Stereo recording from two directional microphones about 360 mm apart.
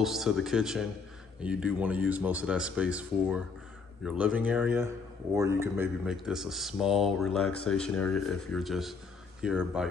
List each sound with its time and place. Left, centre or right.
0.0 s speech: centre